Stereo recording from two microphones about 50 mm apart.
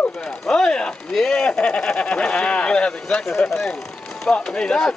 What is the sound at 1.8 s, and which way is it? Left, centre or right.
Speech, left.